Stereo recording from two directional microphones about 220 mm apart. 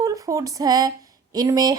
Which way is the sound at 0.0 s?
15° right (ahead or behind).